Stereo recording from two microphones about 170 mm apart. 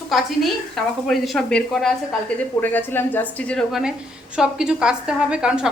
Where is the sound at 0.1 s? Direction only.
Centre (ahead or behind).